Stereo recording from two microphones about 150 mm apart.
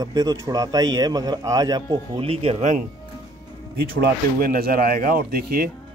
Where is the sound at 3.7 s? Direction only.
80° right.